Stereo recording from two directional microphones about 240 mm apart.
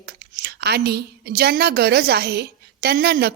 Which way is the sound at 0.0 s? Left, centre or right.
Right.